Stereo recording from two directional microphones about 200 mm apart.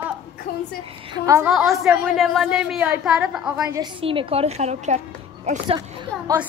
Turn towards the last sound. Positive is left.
turn(degrees=-20)  # may be behind; listen again after turning